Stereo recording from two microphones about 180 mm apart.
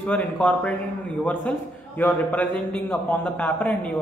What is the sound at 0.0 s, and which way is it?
Speech, 10° left (ahead or behind).